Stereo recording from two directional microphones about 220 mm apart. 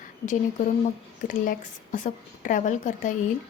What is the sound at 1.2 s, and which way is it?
A woman's voice, 35° left (ahead or behind).